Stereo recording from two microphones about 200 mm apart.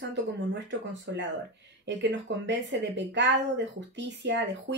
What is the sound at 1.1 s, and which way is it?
A woman's voice, 65° right (ahead or behind).